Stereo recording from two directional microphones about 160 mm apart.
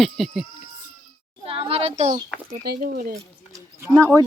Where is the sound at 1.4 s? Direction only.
35° right (ahead or behind).